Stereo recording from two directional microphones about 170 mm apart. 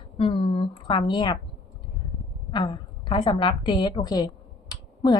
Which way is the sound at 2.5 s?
25° left (ahead or behind).